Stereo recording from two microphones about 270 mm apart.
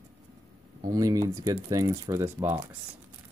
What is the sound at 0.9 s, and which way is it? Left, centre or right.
Speech, centre.